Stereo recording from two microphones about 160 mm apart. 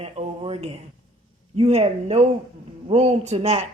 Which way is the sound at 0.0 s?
40° right (ahead or behind).